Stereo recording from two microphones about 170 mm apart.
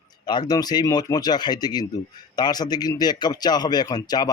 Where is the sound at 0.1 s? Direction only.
25° left (ahead or behind).